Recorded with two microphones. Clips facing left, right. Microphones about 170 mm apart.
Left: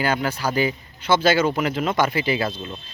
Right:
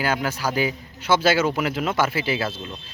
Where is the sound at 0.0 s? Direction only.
5° right (ahead or behind).